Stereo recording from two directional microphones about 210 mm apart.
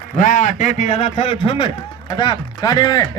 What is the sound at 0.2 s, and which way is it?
A man's voice, 40° left (ahead or behind).